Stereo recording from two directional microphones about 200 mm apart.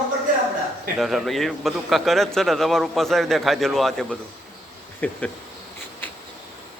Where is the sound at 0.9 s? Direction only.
Centre (ahead or behind).